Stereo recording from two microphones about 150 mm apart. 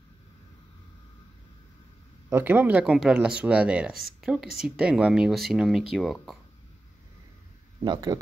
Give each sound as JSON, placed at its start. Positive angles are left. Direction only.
{"t": 2.2, "sound": "speech", "side_deg": -15}
{"t": 7.8, "sound": "speech", "side_deg": -30}